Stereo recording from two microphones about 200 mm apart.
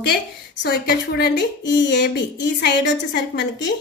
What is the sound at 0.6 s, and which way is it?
A woman's voice, 55° left (ahead or behind).